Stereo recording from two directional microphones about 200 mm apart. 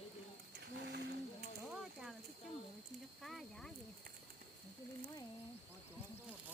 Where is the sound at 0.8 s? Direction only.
55° right (ahead or behind).